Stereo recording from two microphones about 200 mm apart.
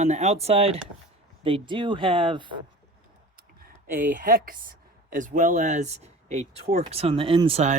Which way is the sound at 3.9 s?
40° right (ahead or behind).